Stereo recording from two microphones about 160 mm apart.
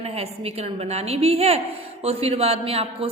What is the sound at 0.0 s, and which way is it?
A woman's voice, 40° right (ahead or behind).